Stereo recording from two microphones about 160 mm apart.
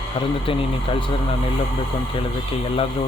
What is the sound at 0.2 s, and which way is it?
A man's voice, 35° left (ahead or behind).